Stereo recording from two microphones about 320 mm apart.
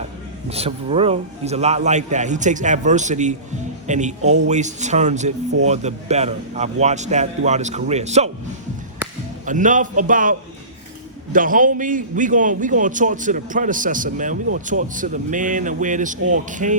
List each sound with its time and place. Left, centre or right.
0.4 s a man's voice: centre
9.5 s a man's voice: right